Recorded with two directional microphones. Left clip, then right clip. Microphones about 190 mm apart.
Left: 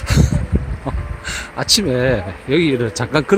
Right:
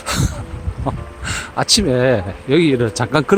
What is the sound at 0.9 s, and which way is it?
Speech, 15° right (ahead or behind).